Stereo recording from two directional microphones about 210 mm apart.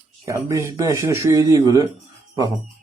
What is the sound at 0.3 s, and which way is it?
Speech, 15° right (ahead or behind).